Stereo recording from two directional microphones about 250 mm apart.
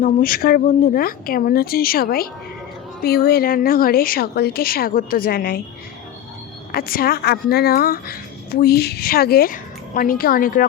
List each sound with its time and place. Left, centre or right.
0.0 s speech: left
6.7 s speech: left